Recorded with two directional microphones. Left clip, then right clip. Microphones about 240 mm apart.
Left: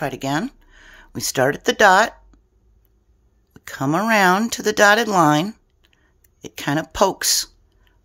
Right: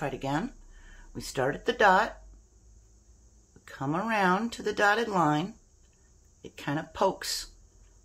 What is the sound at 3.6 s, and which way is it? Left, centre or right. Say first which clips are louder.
Speech: left 11 dB; left.